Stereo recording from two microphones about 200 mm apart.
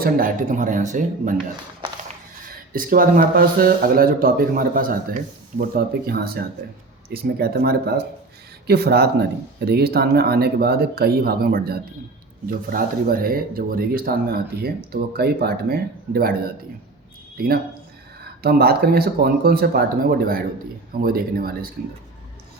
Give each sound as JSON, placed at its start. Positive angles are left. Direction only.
{"t": 0.0, "sound": "speech", "side_deg": -45}
{"t": 2.7, "sound": "speech", "side_deg": -45}
{"t": 17.3, "sound": "speech", "side_deg": -50}